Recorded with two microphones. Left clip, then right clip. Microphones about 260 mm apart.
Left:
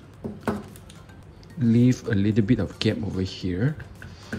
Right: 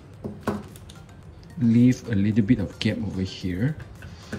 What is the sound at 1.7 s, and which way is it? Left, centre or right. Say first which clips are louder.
Speech: right 1 dB; centre.